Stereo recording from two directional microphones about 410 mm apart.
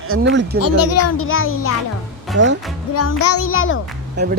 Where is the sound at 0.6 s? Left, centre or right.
Left.